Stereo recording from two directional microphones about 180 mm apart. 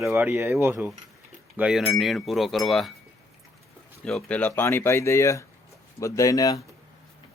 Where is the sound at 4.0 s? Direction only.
5° left (ahead or behind); by 6.6 s 20° left (ahead or behind).